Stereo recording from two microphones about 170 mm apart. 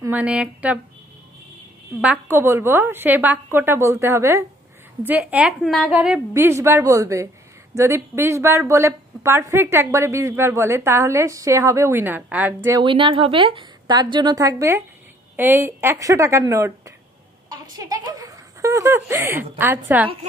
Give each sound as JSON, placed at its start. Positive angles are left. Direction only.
{"t": 0.0, "sound": "speech", "side_deg": -10}
{"t": 2.0, "sound": "a woman's voice", "side_deg": -10}
{"t": 12.8, "sound": "a woman's voice", "side_deg": -30}
{"t": 17.6, "sound": "a sound", "side_deg": -20}
{"t": 19.6, "sound": "a woman's voice", "side_deg": -10}